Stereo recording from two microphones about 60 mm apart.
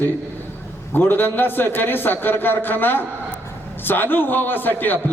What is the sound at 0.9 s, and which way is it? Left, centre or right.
A man's voice, left.